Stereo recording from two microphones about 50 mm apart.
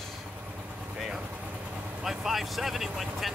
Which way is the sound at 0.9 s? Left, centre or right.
Centre.